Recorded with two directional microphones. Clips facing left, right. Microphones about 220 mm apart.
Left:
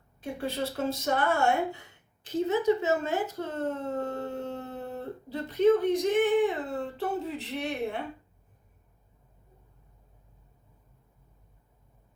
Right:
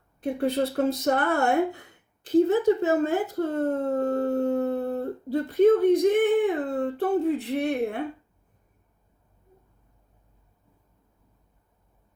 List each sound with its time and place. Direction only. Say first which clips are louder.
0.3 s speech: right 7 dB; 55° right (ahead or behind)